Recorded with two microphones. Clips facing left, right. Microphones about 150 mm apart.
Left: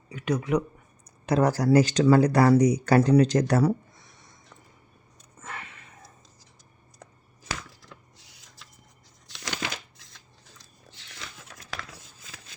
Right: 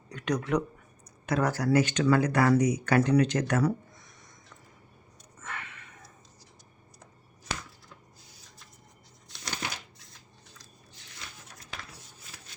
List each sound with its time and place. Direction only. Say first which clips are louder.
0.1 s speech: left 3 dB; 5° left (ahead or behind)
1.3 s speech: left 5 dB; 35° left (ahead or behind)
5.4 s sniff: left 1 dB; 30° left (ahead or behind)
7.9 s printer: left 2 dB; 90° left
9.2 s a sound: left 3 dB; 85° left